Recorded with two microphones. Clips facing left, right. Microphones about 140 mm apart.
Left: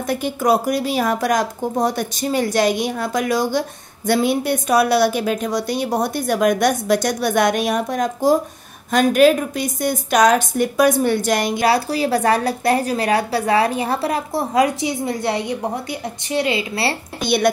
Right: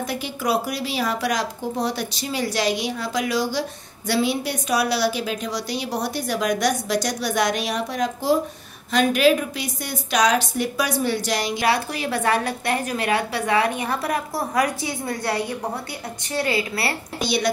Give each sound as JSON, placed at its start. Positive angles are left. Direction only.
{"t": 0.0, "sound": "a woman's voice", "side_deg": 50}
{"t": 11.6, "sound": "a woman's voice", "side_deg": 35}
{"t": 17.2, "sound": "speech", "side_deg": 55}